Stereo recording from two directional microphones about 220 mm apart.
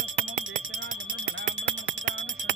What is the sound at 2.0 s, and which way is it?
Music, 60° right (ahead or behind).